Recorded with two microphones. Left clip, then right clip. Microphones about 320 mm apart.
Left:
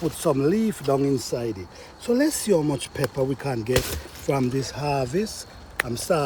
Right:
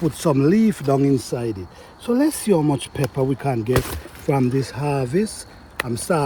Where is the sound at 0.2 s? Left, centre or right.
Right.